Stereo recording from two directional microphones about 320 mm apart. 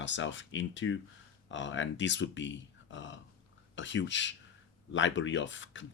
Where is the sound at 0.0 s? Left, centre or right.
Left.